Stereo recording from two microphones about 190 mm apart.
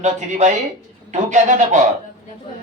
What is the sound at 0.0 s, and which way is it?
Speech, 40° right (ahead or behind).